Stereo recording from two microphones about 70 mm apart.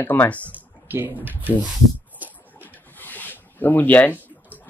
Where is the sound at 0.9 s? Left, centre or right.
Right.